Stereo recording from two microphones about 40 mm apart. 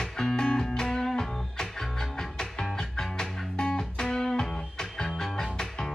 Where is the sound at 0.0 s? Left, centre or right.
Centre.